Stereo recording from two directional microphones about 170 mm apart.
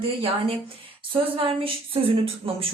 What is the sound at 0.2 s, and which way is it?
Speech, 35° right (ahead or behind).